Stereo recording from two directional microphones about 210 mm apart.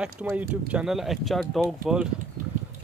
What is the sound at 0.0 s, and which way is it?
Speech, 5° right (ahead or behind).